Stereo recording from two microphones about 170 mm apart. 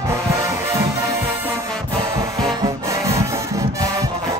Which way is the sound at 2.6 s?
20° right (ahead or behind).